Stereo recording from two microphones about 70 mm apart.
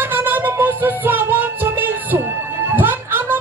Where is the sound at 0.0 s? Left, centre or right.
Right.